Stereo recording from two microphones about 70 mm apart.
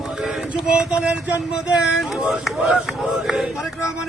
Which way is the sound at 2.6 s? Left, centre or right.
Centre.